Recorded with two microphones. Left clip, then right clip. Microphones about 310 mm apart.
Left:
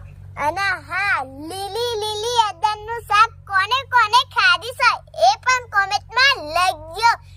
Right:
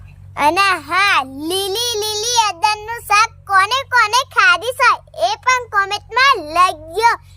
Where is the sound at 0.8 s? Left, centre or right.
Right.